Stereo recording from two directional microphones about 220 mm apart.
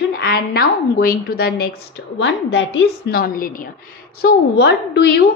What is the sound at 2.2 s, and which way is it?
A woman's voice, 55° left (ahead or behind).